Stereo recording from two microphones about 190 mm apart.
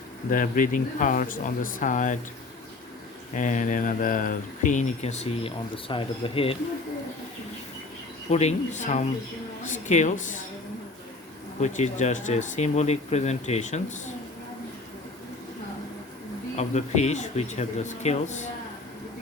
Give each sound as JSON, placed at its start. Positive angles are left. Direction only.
{"t": 0.3, "sound": "speech", "side_deg": 45}
{"t": 3.3, "sound": "speech", "side_deg": 40}
{"t": 8.3, "sound": "speech", "side_deg": 35}
{"t": 11.6, "sound": "speech", "side_deg": 40}
{"t": 16.6, "sound": "speech", "side_deg": 35}